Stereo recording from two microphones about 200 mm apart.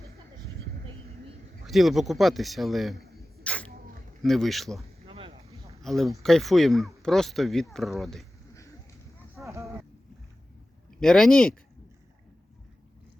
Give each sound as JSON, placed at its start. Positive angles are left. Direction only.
{"t": 1.6, "sound": "speech", "side_deg": 0}
{"t": 3.4, "sound": "sneeze", "side_deg": 5}
{"t": 4.2, "sound": "speech", "side_deg": 0}
{"t": 5.0, "sound": "boat", "side_deg": -30}
{"t": 5.8, "sound": "speech", "side_deg": 0}
{"t": 9.3, "sound": "a sound", "side_deg": -15}
{"t": 11.0, "sound": "speech", "side_deg": 5}